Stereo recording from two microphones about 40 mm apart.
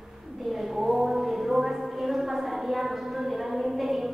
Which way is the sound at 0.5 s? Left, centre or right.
Centre.